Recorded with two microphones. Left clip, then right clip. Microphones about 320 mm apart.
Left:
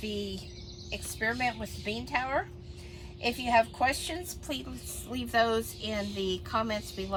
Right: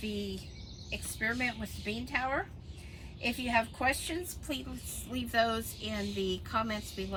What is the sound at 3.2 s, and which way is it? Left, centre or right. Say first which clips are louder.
Speech: left 5 dB; centre.